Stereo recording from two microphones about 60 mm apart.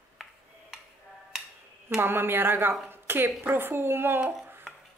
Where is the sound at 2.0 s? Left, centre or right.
Right.